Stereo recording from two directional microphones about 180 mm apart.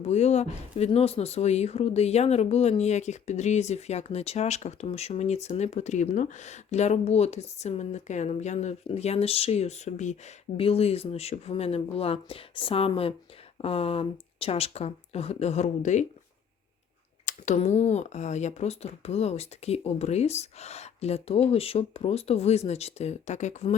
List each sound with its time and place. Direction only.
0.0 s speech: 40° left (ahead or behind)
17.2 s speech: 40° left (ahead or behind)